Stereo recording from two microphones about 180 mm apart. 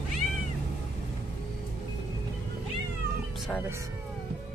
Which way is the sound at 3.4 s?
5° left (ahead or behind).